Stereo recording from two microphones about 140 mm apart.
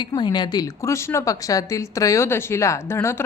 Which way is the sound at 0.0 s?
30° left (ahead or behind).